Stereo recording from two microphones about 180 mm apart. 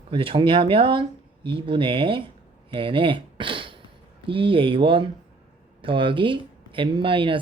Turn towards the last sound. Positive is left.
turn(degrees=-30)  # may be behind; listen again after turning